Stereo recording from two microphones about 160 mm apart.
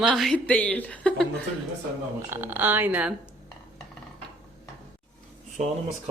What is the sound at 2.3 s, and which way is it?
Speech, 10° right (ahead or behind).